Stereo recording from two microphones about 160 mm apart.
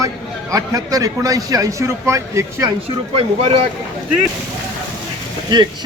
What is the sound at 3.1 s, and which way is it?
Speech, 40° right (ahead or behind).